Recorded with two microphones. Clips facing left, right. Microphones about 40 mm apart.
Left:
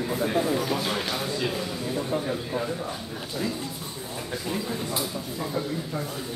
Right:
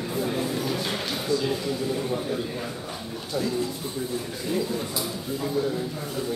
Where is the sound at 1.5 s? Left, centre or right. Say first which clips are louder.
Right 3 dB; centre.